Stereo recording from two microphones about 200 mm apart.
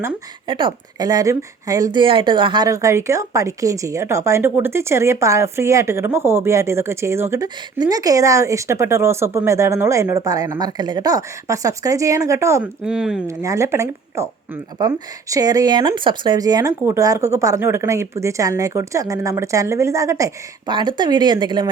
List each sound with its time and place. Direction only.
0.4 s a woman's voice: 25° right (ahead or behind)
12.8 s speech: 5° right (ahead or behind)
13.2 s a woman's voice: 15° right (ahead or behind)